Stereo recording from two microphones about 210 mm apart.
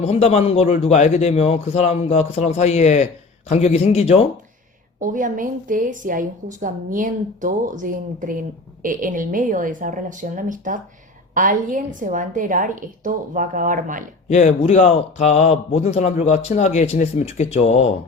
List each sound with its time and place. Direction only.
0.0 s speech: 30° left (ahead or behind)
4.9 s a woman's voice: 40° right (ahead or behind)
14.3 s speech: 35° left (ahead or behind)